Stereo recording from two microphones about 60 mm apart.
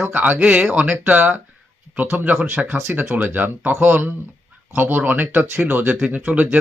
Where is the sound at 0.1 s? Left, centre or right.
Right.